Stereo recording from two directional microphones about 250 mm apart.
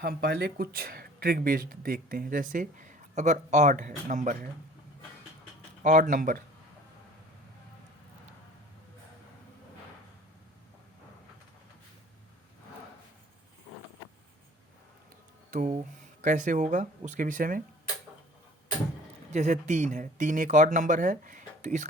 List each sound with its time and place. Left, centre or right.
0.0 s speech: right
5.8 s speech: right
15.4 s speech: right
19.3 s speech: right